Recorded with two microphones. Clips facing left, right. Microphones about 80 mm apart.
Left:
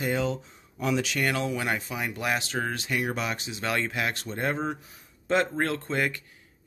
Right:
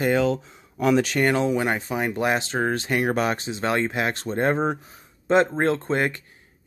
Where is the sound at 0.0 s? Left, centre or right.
Right.